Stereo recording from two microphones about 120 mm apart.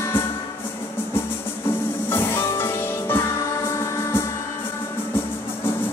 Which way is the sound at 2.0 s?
20° left (ahead or behind).